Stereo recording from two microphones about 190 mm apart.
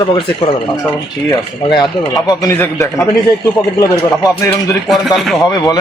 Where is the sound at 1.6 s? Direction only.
25° left (ahead or behind).